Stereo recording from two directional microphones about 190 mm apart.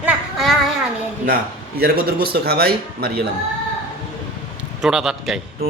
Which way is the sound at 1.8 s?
55° right (ahead or behind).